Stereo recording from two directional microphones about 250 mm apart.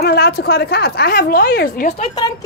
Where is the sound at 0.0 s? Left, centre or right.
Left.